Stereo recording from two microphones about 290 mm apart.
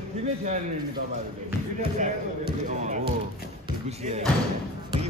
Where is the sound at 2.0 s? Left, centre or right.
Right.